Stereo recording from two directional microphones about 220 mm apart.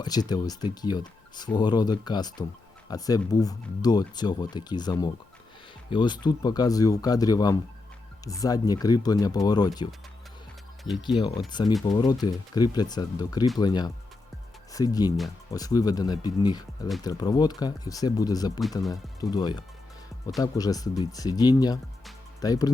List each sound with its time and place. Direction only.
0.0 s speech: 20° left (ahead or behind)